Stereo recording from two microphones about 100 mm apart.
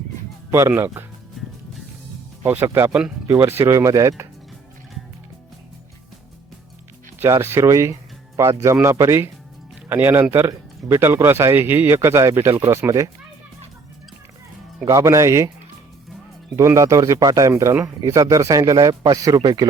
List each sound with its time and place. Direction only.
0.5 s speech: 25° right (ahead or behind)
2.4 s speech: 20° right (ahead or behind)
7.2 s speech: 25° right (ahead or behind)
14.8 s speech: 30° right (ahead or behind)
16.6 s speech: 35° right (ahead or behind)